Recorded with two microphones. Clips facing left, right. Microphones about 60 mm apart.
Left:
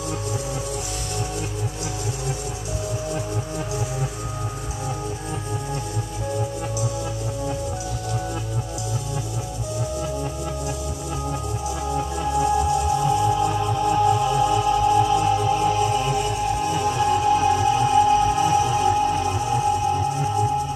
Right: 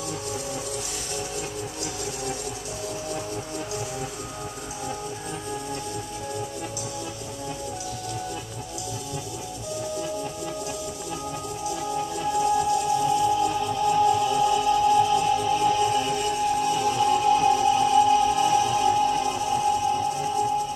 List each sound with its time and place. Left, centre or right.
3.1 s music: left
11.9 s music: left